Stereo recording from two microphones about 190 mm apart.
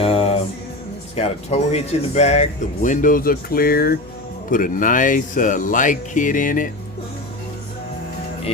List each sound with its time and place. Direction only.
0.0 s music: 30° left (ahead or behind)
1.1 s speech: 35° left (ahead or behind)